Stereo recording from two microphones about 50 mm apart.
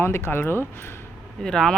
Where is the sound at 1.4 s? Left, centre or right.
Centre.